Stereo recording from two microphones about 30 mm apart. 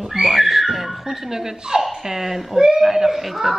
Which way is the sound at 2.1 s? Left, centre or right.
Centre.